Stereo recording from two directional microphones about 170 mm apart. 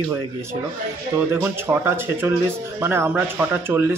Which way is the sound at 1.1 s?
15° right (ahead or behind).